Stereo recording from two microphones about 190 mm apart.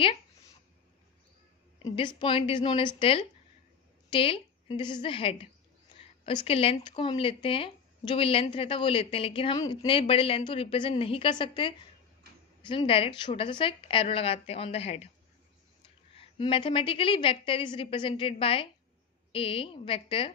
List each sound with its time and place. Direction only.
1.9 s a woman's voice: 25° left (ahead or behind)
16.2 s speech: 30° left (ahead or behind)